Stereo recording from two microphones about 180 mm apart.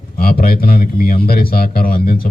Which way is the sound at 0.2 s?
55° left (ahead or behind).